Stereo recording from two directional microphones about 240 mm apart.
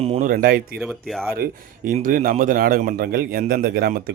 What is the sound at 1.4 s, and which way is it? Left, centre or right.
Speech, right.